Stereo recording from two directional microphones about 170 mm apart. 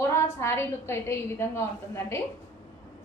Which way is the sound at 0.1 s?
15° left (ahead or behind).